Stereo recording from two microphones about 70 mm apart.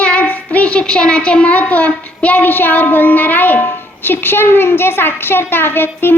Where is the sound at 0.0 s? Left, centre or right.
Centre.